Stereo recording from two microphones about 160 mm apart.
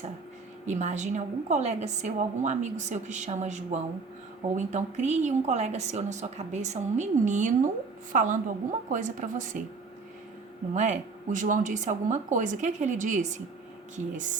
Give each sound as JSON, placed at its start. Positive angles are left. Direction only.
{"t": 0.6, "sound": "a woman's voice", "side_deg": -45}
{"t": 10.8, "sound": "a woman's voice", "side_deg": -50}